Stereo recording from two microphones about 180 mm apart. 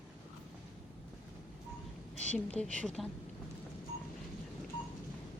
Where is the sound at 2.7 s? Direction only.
5° left (ahead or behind).